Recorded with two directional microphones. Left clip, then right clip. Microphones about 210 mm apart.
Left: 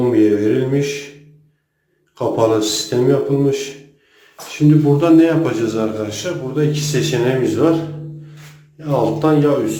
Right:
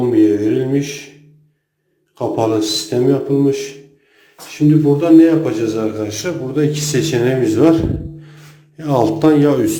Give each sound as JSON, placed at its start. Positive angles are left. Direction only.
{"t": 0.0, "sound": "mantra", "side_deg": 0}
{"t": 2.1, "sound": "a man's voice", "side_deg": -5}
{"t": 4.7, "sound": "a man's voice", "side_deg": 0}
{"t": 8.8, "sound": "a man's voice", "side_deg": -30}